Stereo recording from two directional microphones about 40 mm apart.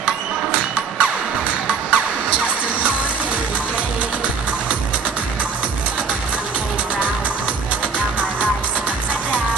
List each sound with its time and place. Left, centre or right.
1.9 s music: right